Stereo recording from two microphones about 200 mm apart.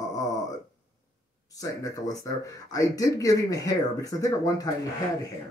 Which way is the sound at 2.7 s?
15° left (ahead or behind).